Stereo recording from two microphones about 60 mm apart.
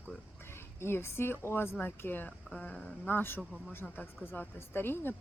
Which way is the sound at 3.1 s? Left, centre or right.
Left.